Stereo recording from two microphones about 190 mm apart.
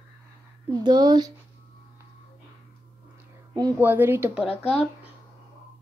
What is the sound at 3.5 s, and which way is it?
A woman's voice, 15° right (ahead or behind).